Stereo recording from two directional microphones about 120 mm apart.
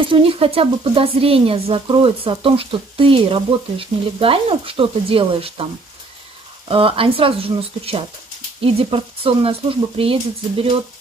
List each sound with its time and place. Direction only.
0.0 s speech: 50° right (ahead or behind)
6.7 s speech: 50° right (ahead or behind)